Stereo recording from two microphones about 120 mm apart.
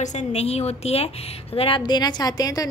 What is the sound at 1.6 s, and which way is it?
A woman's voice, 45° left (ahead or behind).